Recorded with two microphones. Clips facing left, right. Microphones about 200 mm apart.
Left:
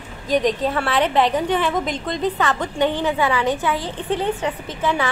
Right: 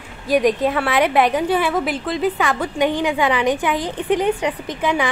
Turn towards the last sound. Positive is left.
turn(degrees=-15)  # may be behind; listen again after turning